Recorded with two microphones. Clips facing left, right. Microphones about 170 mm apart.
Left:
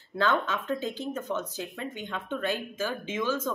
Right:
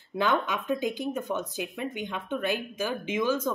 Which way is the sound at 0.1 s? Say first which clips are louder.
Even; 15° right (ahead or behind).